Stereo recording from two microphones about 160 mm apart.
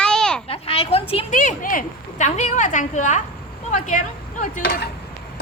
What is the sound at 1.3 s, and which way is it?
A woman's voice, 55° left (ahead or behind).